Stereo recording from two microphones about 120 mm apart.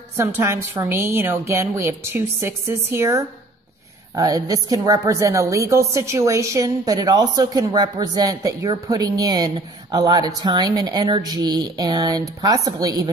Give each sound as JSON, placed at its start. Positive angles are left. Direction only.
{"t": 0.2, "sound": "a woman's voice", "side_deg": -25}